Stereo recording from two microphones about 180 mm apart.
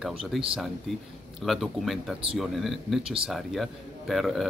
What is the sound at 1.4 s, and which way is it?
A man's voice, centre (ahead or behind).